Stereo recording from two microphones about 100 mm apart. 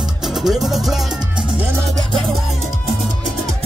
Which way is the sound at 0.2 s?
5° right (ahead or behind).